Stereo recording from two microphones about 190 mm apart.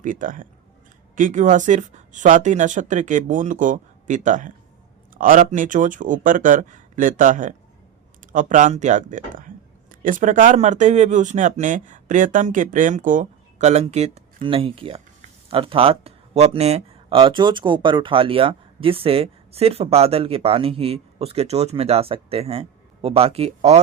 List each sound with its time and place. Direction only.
0.0 s speech: 45° right (ahead or behind)